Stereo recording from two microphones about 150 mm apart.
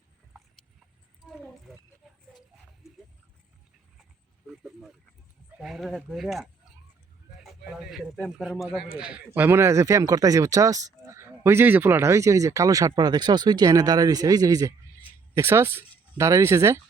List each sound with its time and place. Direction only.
4.4 s speech: 5° right (ahead or behind); by 16.8 s 20° right (ahead or behind)